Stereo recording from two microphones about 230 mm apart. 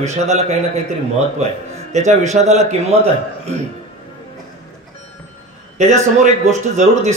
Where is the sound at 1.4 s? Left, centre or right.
Right.